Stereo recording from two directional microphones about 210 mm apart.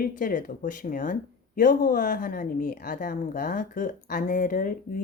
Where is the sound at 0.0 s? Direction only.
40° left (ahead or behind).